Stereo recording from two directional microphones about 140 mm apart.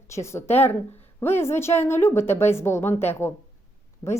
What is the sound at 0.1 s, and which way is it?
A woman's voice, 20° left (ahead or behind).